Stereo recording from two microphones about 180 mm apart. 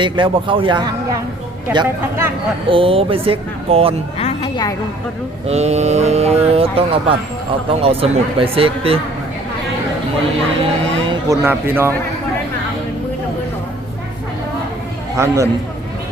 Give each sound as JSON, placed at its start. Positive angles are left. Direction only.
{"t": 0.0, "sound": "speech", "side_deg": -30}
{"t": 4.2, "sound": "music", "side_deg": 35}
{"t": 5.5, "sound": "speech", "side_deg": -35}
{"t": 11.1, "sound": "speech", "side_deg": -15}
{"t": 15.1, "sound": "a man's voice", "side_deg": -15}